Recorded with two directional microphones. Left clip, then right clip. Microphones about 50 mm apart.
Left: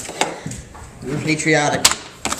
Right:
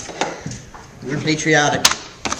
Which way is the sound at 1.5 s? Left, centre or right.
Right.